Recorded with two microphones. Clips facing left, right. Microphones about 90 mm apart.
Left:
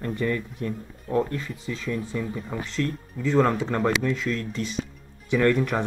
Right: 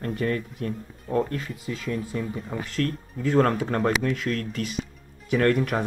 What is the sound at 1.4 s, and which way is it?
Speech, 35° right (ahead or behind).